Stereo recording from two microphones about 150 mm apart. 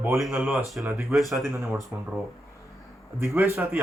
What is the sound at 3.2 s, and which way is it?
Speech, 15° right (ahead or behind).